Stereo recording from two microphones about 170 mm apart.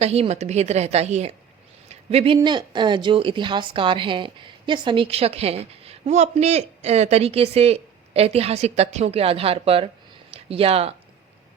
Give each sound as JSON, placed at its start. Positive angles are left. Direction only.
{"t": 0.0, "sound": "speech", "side_deg": -40}